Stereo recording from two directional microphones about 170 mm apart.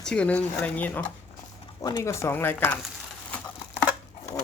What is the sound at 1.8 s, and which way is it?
Speech, 25° left (ahead or behind).